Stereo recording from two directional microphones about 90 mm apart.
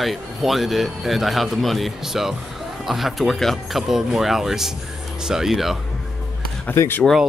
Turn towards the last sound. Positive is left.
turn(degrees=25)  # may be behind; listen again after turning